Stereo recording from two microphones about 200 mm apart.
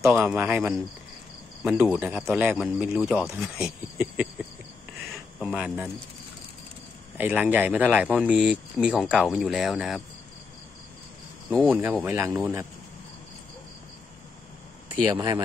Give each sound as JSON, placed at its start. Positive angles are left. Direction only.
{"t": 0.0, "sound": "speech", "side_deg": 0}
{"t": 5.4, "sound": "speech", "side_deg": -5}
{"t": 7.2, "sound": "speech", "side_deg": -10}
{"t": 11.5, "sound": "speech", "side_deg": 5}
{"t": 11.8, "sound": "speech", "side_deg": -10}
{"t": 15.0, "sound": "speech", "side_deg": -20}